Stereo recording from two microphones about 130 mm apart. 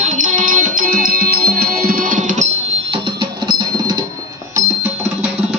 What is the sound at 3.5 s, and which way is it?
Music, 35° right (ahead or behind).